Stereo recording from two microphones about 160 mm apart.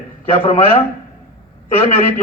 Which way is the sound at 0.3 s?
40° left (ahead or behind).